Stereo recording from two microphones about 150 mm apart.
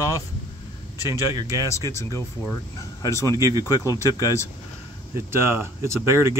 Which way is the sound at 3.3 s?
20° right (ahead or behind).